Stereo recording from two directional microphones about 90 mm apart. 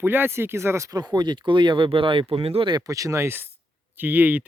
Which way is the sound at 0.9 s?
50° right (ahead or behind).